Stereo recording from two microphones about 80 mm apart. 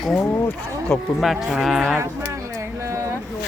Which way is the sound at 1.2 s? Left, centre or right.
Centre.